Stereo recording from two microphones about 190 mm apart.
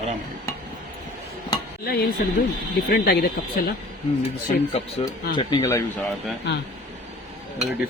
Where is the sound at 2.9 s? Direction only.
55° left (ahead or behind).